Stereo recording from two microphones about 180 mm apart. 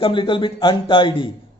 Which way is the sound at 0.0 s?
25° left (ahead or behind).